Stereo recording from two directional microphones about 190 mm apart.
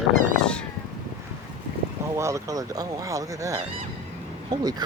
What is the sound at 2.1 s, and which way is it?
Speech, 15° right (ahead or behind).